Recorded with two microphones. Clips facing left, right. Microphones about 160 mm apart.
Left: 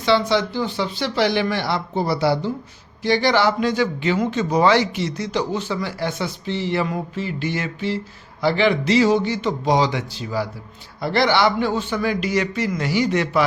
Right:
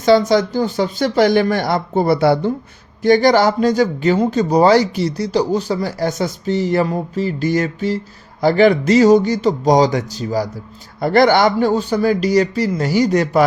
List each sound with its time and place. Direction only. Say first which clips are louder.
0.0 s speech: right 6 dB; 45° right (ahead or behind)